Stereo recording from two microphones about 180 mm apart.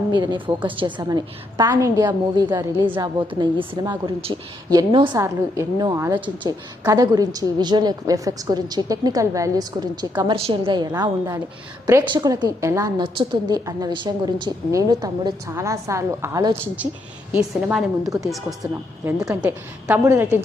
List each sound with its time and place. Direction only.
0.2 s a woman's voice: 25° right (ahead or behind)
3.0 s a woman's voice: 25° right (ahead or behind)
18.0 s a woman's voice: 20° right (ahead or behind)
19.3 s a woman's voice: 10° right (ahead or behind)